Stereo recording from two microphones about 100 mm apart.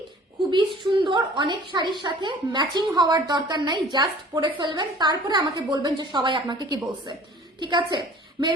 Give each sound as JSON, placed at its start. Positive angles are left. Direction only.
{"t": 0.5, "sound": "a woman's voice", "side_deg": -55}